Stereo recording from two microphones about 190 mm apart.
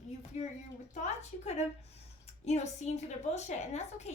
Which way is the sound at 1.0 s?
35° left (ahead or behind).